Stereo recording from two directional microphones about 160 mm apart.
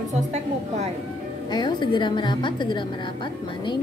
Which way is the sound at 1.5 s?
30° left (ahead or behind).